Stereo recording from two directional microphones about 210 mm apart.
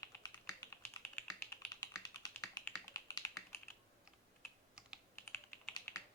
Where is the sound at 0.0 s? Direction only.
15° left (ahead or behind).